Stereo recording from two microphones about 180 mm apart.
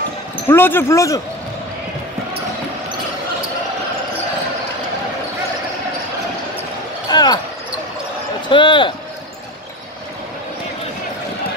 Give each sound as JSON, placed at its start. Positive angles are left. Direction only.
{"t": 0.5, "sound": "speech", "side_deg": 10}
{"t": 7.1, "sound": "basketball bounce", "side_deg": 25}
{"t": 8.5, "sound": "a sound", "side_deg": 25}